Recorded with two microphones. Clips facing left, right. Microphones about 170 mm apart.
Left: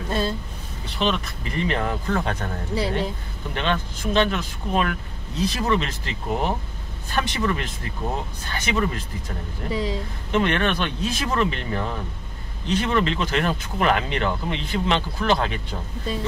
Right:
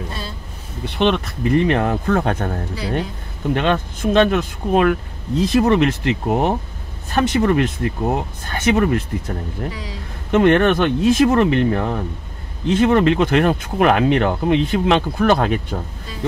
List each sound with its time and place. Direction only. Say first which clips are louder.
0.8 s speech: right 6 dB; 60° right (ahead or behind)
7.1 s speech: right 8 dB; 45° right (ahead or behind)
9.7 s speech: left 5 dB; 25° left (ahead or behind)
10.3 s speech: right 8 dB; 50° right (ahead or behind)